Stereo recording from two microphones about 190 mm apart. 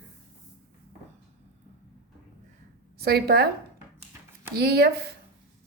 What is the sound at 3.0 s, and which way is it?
Speech, 55° right (ahead or behind).